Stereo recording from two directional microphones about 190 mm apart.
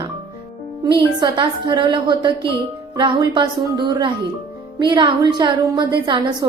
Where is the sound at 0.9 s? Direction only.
25° right (ahead or behind).